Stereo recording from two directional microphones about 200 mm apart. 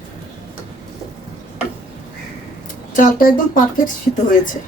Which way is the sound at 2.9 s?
40° left (ahead or behind).